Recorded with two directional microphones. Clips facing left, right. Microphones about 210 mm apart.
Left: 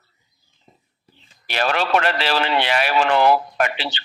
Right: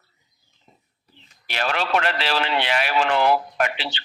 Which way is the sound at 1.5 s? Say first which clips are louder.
Left 3 dB; 45° left (ahead or behind).